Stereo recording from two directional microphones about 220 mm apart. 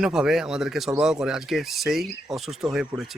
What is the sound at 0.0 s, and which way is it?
Speech, centre (ahead or behind).